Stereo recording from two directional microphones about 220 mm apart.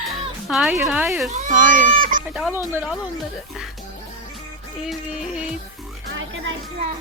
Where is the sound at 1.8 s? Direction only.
40° right (ahead or behind).